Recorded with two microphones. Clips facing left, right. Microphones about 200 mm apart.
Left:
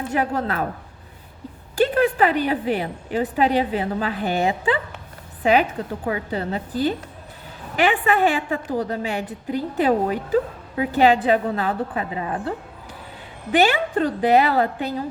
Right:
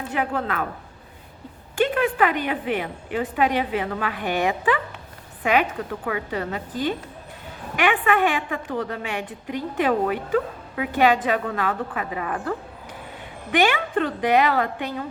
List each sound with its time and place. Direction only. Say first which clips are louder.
0.1 s a woman's voice: left 2 dB; 35° left (ahead or behind)
1.7 s a woman's voice: left 3 dB; 35° left (ahead or behind)